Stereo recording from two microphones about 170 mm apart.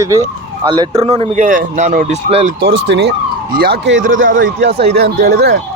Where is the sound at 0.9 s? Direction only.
35° right (ahead or behind).